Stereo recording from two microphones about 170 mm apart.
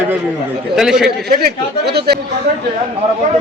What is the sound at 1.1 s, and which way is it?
A man's voice, 75° right (ahead or behind).